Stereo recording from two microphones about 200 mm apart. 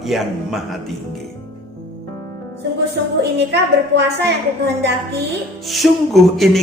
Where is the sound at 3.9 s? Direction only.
55° right (ahead or behind).